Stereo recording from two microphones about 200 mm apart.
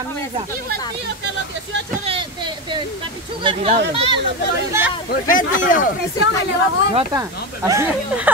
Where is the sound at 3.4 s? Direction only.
25° right (ahead or behind).